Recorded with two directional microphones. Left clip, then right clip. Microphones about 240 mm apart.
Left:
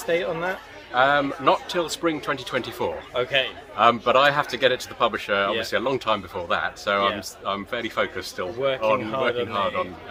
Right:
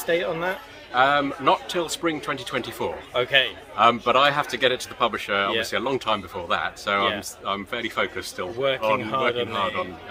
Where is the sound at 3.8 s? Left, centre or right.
Centre.